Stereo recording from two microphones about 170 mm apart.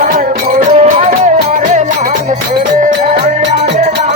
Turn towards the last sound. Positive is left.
turn(degrees=-50)  # may be behind; listen again after turning